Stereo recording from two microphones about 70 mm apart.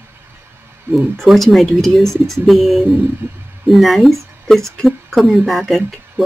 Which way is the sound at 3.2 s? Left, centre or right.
Right.